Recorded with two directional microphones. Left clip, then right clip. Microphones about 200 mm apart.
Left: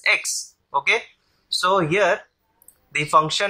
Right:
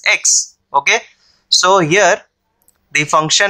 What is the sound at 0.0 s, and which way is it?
Speech, 35° right (ahead or behind).